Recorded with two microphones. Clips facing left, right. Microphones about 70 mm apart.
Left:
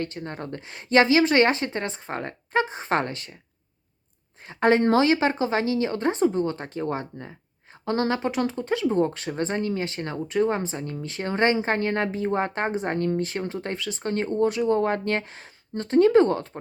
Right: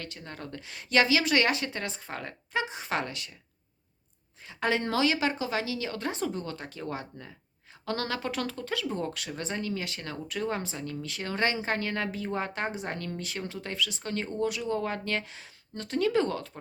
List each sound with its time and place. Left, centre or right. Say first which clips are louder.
0.0 s speech: left 9 dB; left
4.4 s speech: left 9 dB; left